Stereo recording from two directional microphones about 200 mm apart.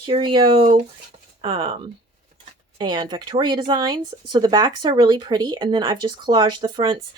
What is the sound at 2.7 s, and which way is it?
Speech, 20° right (ahead or behind).